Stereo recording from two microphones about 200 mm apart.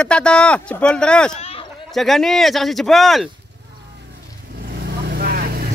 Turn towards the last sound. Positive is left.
turn(degrees=-45)  # may be behind; listen again after turning